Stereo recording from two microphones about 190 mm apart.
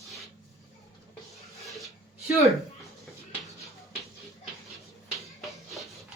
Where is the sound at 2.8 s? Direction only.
Centre (ahead or behind).